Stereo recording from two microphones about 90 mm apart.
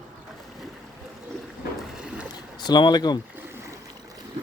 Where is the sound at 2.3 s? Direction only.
50° left (ahead or behind).